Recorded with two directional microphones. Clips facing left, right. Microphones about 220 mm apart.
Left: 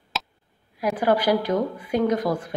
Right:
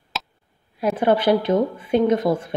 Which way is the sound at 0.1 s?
Centre (ahead or behind).